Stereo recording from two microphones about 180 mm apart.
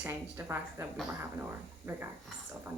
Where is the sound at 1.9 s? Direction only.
15° right (ahead or behind).